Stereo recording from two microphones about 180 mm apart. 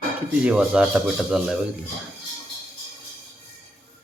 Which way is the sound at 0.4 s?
5° right (ahead or behind).